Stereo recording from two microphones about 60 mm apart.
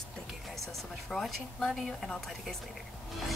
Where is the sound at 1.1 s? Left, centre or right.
Centre.